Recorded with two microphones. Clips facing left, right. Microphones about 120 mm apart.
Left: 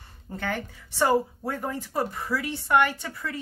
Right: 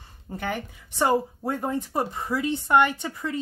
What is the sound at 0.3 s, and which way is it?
Speech, 20° right (ahead or behind).